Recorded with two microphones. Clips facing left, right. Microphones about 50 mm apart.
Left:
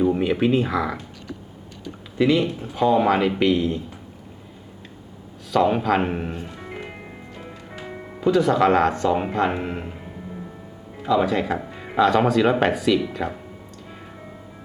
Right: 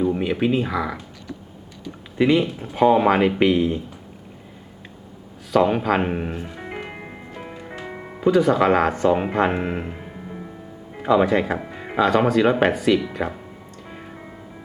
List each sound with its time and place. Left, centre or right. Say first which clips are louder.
0.0 s speech: left 1 dB; centre
2.1 s speech: right 1 dB; centre
2.7 s speech: right 2 dB; right
5.5 s speech: right 1 dB; centre
7.3 s music: right 6 dB; right
7.8 s speech: left 2 dB; centre
9.3 s speech: right 2 dB; right
10.9 s speech: right 3 dB; right; by 13.4 s centre